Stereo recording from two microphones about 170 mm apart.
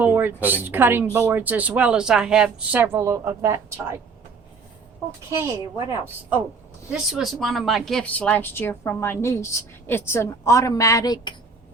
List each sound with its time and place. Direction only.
0.0 s speech: 10° right (ahead or behind)
5.4 s speech: 20° right (ahead or behind)
6.9 s speech: centre (ahead or behind); by 11.3 s 25° left (ahead or behind)